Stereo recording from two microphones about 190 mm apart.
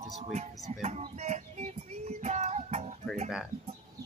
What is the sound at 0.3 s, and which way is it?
Speech, 35° right (ahead or behind).